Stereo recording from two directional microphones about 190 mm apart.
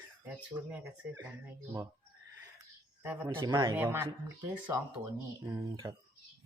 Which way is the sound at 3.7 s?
10° right (ahead or behind).